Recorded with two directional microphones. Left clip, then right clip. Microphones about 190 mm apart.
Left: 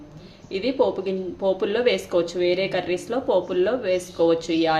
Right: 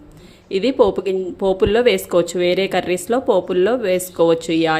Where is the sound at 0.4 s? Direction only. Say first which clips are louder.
Right 6 dB; 45° right (ahead or behind).